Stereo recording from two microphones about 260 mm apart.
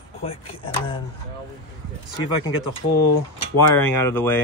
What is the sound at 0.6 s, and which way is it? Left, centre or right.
Speech, centre.